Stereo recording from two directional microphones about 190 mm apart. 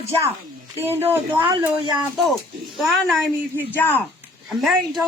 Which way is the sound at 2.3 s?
Centre (ahead or behind).